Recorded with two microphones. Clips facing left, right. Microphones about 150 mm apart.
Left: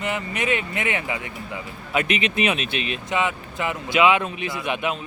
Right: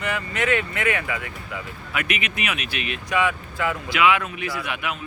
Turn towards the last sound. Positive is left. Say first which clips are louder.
# left 3 dB
turn(degrees=25)  # may be behind; listen again after turning